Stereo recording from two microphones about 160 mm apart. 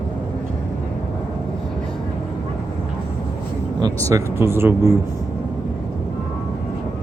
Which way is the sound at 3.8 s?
20° right (ahead or behind).